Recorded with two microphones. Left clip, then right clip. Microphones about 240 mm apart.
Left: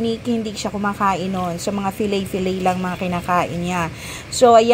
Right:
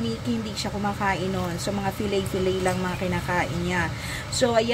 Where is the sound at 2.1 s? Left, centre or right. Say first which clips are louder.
Left 2 dB; centre.